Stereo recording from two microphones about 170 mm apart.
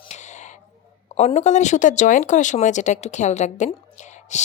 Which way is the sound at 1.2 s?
40° left (ahead or behind).